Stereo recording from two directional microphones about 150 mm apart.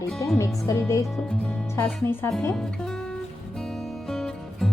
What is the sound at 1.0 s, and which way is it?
Speech, centre (ahead or behind).